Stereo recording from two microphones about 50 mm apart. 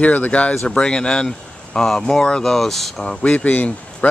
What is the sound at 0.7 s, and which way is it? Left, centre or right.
Speech, centre.